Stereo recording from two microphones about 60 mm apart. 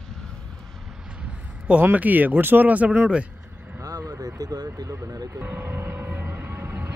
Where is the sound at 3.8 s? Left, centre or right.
Right.